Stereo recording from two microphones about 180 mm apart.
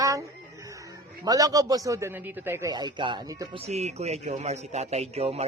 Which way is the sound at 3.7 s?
40° right (ahead or behind).